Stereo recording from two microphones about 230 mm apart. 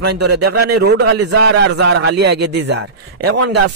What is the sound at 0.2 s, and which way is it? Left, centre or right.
Speech, right.